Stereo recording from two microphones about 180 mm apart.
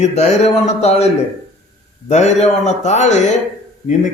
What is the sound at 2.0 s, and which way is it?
Speech, 40° left (ahead or behind).